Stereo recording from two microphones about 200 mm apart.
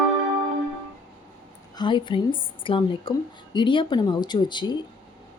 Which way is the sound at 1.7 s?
25° left (ahead or behind).